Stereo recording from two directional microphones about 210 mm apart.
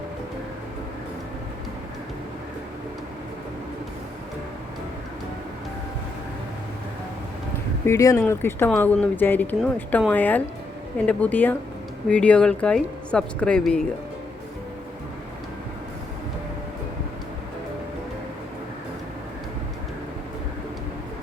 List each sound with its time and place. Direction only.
7.9 s speech: 15° left (ahead or behind)